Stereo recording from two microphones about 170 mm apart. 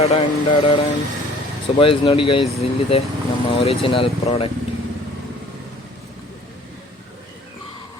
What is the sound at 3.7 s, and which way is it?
Speech, 35° left (ahead or behind).